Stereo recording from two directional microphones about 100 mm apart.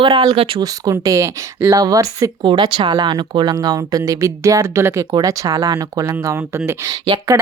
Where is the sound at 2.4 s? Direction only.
50° right (ahead or behind); by 6.9 s 25° right (ahead or behind).